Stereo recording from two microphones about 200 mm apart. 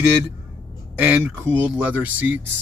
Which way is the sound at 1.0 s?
10° right (ahead or behind).